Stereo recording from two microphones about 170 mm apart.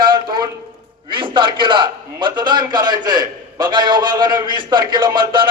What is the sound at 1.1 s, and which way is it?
A man's voice, 30° right (ahead or behind).